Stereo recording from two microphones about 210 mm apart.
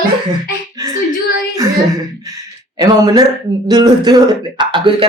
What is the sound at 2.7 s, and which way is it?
Speech, 20° right (ahead or behind).